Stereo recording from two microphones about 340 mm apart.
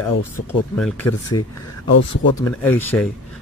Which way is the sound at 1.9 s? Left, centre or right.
Left.